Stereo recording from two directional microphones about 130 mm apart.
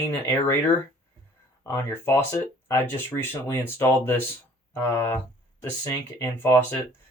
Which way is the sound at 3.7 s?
20° left (ahead or behind).